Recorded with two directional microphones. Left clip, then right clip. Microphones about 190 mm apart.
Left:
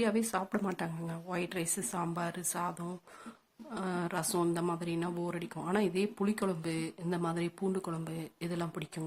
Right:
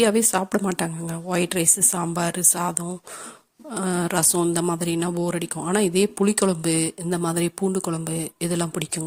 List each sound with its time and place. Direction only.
0.0 s a woman's voice: 45° right (ahead or behind)